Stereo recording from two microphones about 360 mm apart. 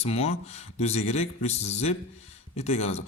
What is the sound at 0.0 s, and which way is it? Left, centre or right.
Speech, centre.